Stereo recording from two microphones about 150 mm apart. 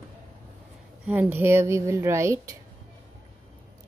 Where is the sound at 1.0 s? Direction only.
15° right (ahead or behind).